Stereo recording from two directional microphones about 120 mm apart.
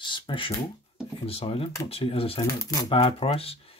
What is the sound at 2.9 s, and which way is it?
Speech, 50° left (ahead or behind).